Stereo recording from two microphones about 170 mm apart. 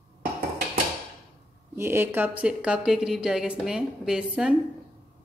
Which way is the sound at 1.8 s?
15° right (ahead or behind).